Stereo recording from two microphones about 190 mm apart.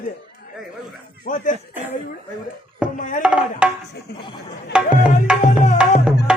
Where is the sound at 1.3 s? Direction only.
40° left (ahead or behind).